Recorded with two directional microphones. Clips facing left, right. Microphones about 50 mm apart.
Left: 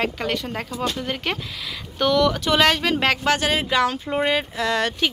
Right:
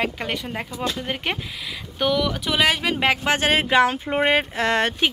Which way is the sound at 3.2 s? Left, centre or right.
Right.